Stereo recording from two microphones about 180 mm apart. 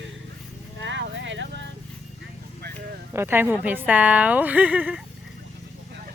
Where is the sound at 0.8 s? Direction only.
90° right.